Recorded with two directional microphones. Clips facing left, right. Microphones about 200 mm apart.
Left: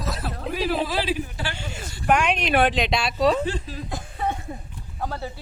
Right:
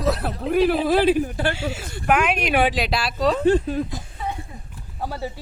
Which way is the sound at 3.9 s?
55° left (ahead or behind).